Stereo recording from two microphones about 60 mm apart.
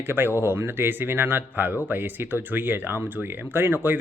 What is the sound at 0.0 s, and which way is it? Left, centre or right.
Speech, right.